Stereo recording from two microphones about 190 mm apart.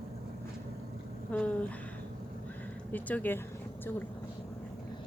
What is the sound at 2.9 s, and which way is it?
Speech, 10° left (ahead or behind).